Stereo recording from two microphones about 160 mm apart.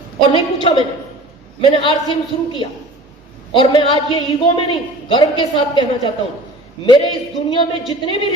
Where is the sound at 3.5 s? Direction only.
30° left (ahead or behind).